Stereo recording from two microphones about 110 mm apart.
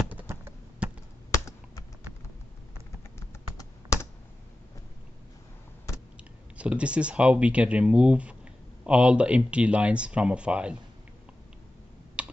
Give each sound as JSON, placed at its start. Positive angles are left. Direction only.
{"t": 0.1, "sound": "computer keyboard", "side_deg": -20}
{"t": 3.2, "sound": "computer keyboard", "side_deg": 25}
{"t": 6.5, "sound": "speech", "side_deg": -10}
{"t": 12.2, "sound": "typing", "side_deg": -10}